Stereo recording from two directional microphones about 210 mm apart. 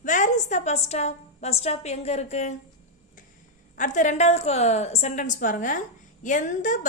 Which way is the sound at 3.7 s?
40° left (ahead or behind).